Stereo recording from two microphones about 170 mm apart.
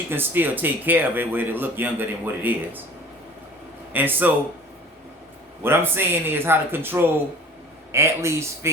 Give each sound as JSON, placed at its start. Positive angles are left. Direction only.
{"t": 0.1, "sound": "speech", "side_deg": -10}
{"t": 3.9, "sound": "speech", "side_deg": -10}
{"t": 5.6, "sound": "speech", "side_deg": -15}